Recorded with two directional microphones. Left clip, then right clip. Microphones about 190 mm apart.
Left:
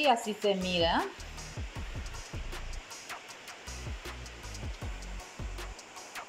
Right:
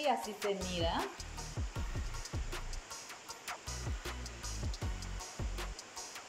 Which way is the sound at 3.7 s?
Centre (ahead or behind).